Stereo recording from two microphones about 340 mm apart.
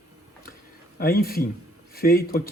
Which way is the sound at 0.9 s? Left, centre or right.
Left.